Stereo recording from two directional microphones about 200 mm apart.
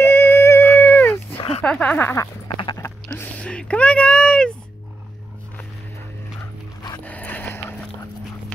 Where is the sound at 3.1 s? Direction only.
5° left (ahead or behind).